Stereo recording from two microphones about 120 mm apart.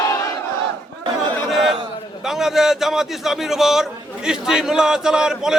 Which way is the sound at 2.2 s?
5° right (ahead or behind).